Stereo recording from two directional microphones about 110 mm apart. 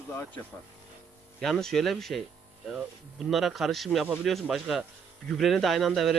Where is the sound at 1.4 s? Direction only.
5° left (ahead or behind).